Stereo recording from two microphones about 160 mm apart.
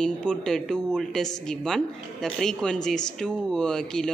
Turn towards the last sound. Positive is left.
turn(degrees=5)  # may be behind; listen again after turning